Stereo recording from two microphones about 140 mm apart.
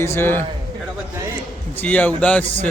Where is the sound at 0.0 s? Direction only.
15° left (ahead or behind).